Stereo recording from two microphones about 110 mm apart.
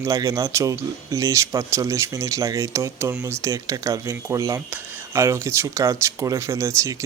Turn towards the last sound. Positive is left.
turn(degrees=-25)  # may be behind; listen again after turning